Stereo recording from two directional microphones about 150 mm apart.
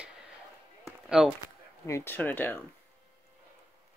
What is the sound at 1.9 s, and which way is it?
Speech, 15° left (ahead or behind).